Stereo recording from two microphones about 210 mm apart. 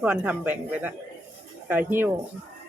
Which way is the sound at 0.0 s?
5° right (ahead or behind).